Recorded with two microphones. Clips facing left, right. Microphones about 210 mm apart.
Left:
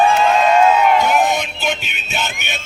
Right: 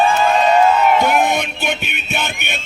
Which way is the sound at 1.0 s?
55° right (ahead or behind).